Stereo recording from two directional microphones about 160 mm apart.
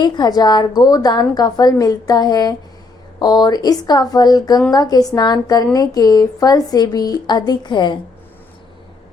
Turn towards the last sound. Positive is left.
turn(degrees=30)  # may be behind; listen again after turning